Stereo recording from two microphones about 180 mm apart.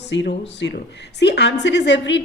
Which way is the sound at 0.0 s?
75° left (ahead or behind).